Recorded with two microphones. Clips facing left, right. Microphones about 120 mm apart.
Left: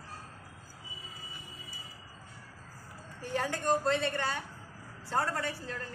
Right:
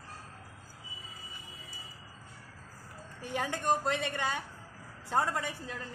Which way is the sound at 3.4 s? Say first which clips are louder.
Left 1 dB; 15° right (ahead or behind).